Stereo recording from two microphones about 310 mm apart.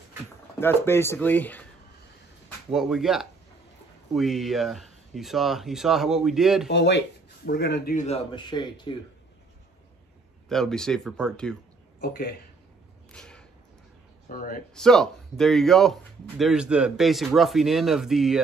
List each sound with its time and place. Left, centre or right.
0.6 s speech: centre
2.7 s a man's voice: centre
6.7 s speech: left; by 8.9 s centre
10.5 s a man's voice: centre
12.0 s speech: left
13.1 s a sound: centre
14.3 s speech: left
14.7 s a man's voice: centre